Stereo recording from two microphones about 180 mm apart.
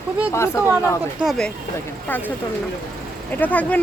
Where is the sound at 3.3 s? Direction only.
10° left (ahead or behind).